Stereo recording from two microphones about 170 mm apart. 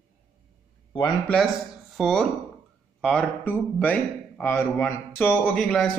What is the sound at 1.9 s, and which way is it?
A man's voice, centre (ahead or behind).